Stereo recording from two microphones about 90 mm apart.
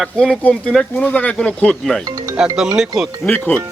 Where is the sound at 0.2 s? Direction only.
10° left (ahead or behind).